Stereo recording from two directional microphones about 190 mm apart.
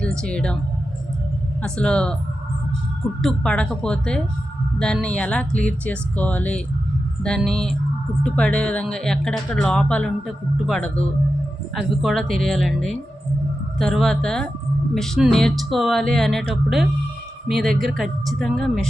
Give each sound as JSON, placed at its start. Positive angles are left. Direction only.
{"t": 0.0, "sound": "speech", "side_deg": 5}
{"t": 1.6, "sound": "speech", "side_deg": 5}
{"t": 3.2, "sound": "speech", "side_deg": 5}